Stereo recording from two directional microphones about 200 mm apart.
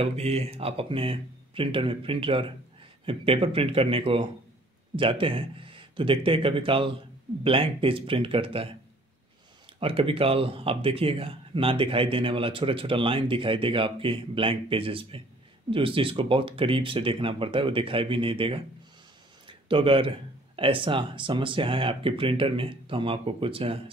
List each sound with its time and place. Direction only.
0.0 s speech: 30° right (ahead or behind)
9.8 s speech: 25° right (ahead or behind)